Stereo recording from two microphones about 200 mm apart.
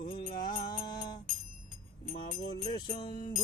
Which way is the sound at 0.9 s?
20° left (ahead or behind).